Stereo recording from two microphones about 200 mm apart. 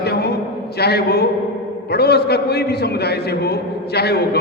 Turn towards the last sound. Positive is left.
turn(degrees=55)  # may be behind; listen again after turning